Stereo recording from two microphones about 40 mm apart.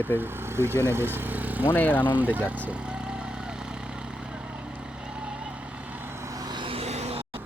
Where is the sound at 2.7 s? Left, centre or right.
Right.